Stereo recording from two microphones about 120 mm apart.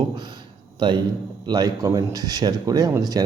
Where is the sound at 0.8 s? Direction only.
40° right (ahead or behind).